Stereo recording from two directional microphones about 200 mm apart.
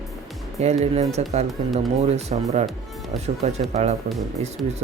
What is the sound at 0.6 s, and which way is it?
Speech, 35° right (ahead or behind).